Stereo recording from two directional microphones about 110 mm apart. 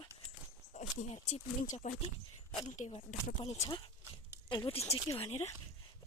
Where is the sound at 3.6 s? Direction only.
40° left (ahead or behind); by 5.5 s 70° left (ahead or behind).